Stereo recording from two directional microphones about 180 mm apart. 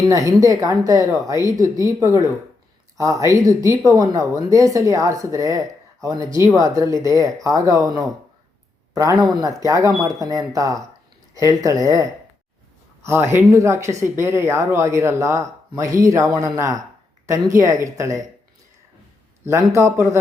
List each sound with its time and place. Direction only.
0.0 s speech: 20° right (ahead or behind)
9.3 s speech: 20° right (ahead or behind)
13.1 s speech: 15° right (ahead or behind)
19.5 s speech: 15° right (ahead or behind)